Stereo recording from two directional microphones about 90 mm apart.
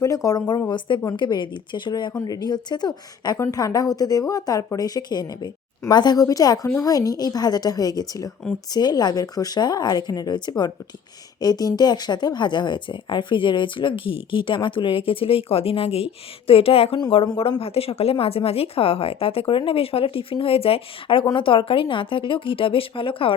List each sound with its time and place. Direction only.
0.0 s speech: 40° left (ahead or behind)
1.1 s speech: 60° left (ahead or behind)
2.1 s speech: 45° left (ahead or behind)
3.3 s speech: 35° left (ahead or behind); by 23.3 s 85° left